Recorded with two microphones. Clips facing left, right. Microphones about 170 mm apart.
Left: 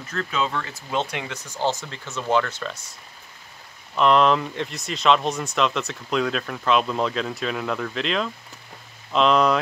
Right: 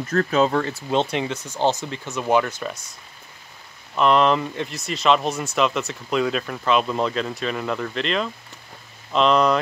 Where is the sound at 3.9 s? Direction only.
Centre (ahead or behind).